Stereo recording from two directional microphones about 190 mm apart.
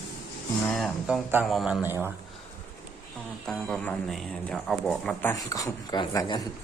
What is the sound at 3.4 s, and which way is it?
Speech, 5° left (ahead or behind).